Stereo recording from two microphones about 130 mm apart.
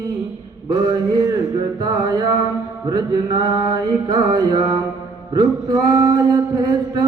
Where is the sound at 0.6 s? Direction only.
30° right (ahead or behind).